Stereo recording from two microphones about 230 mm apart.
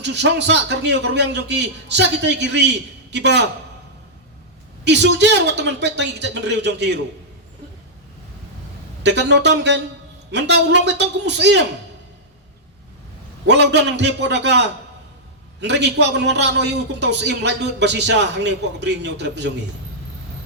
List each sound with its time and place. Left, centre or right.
0.0 s a man's voice: right
4.9 s a man's voice: right
9.0 s a man's voice: right
13.5 s a man's voice: right